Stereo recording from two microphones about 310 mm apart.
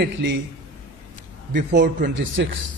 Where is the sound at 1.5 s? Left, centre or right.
Right.